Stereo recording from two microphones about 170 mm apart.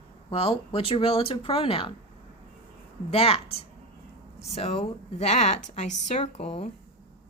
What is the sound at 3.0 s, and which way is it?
A woman's voice, 35° left (ahead or behind).